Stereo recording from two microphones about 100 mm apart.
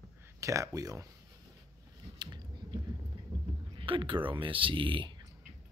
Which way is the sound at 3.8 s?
60° right (ahead or behind).